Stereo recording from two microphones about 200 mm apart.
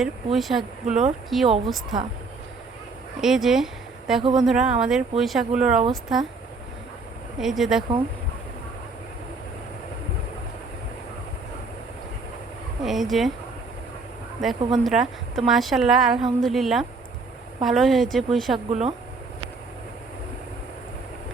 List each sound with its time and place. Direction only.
0.0 s a woman's voice: centre (ahead or behind)
3.2 s a woman's voice: centre (ahead or behind)
7.3 s a woman's voice: centre (ahead or behind)
12.8 s a woman's voice: centre (ahead or behind)
14.4 s a woman's voice: centre (ahead or behind)
18.7 s speech: 30° right (ahead or behind)